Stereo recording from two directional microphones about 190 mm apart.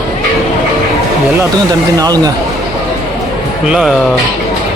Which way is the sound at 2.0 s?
20° right (ahead or behind).